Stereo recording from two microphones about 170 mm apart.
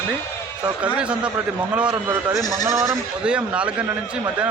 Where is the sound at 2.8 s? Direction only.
5° right (ahead or behind).